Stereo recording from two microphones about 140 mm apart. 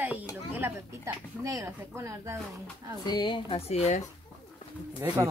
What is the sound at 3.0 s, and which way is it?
Speech, 30° left (ahead or behind).